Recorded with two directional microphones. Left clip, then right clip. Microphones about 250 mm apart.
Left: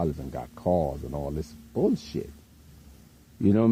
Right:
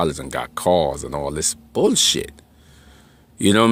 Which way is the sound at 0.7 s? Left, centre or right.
Right.